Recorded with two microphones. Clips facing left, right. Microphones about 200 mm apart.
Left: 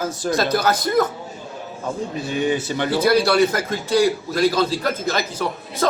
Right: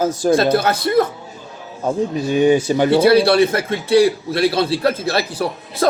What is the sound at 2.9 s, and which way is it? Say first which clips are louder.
Speech: right 4 dB; 30° right (ahead or behind).